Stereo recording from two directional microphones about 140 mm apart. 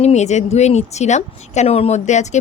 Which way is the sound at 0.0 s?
55° left (ahead or behind).